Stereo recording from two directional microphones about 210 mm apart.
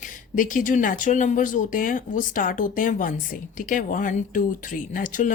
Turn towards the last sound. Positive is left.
turn(degrees=40)  # may be behind; listen again after turning